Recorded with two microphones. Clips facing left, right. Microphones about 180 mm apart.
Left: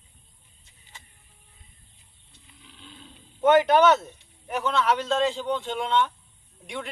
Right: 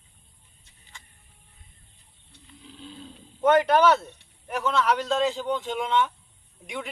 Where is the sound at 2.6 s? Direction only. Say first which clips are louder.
Right 7 dB; 35° right (ahead or behind).